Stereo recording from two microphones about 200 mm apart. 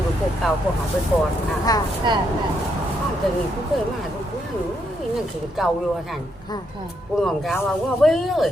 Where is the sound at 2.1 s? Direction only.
20° right (ahead or behind).